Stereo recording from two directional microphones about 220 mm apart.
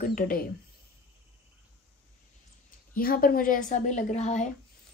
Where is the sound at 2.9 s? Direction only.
40° left (ahead or behind).